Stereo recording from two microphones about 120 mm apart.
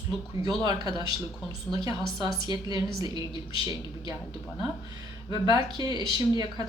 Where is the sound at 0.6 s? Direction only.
30° right (ahead or behind).